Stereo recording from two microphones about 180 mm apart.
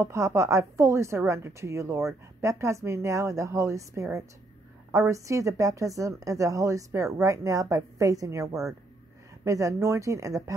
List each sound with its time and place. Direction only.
0.0 s a woman's voice: 15° right (ahead or behind)